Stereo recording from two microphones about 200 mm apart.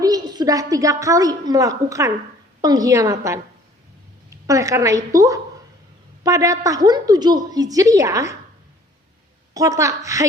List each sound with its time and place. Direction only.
0.0 s a woman's voice: 20° right (ahead or behind)
9.6 s a woman's voice: 15° right (ahead or behind)